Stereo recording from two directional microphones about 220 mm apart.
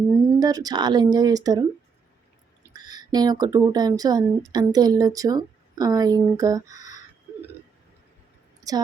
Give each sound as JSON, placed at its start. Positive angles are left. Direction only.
{"t": 0.3, "sound": "speech", "side_deg": -15}
{"t": 2.6, "sound": "speech", "side_deg": -20}
{"t": 8.6, "sound": "a woman's voice", "side_deg": -15}